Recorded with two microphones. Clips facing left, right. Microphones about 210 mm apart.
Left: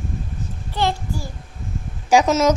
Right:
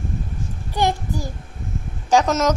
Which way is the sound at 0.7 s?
15° right (ahead or behind).